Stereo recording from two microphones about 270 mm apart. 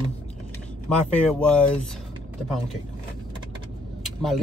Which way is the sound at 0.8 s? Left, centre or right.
Centre.